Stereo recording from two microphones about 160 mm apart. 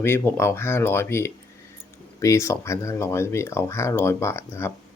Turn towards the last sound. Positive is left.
turn(degrees=15)  # may be behind; listen again after turning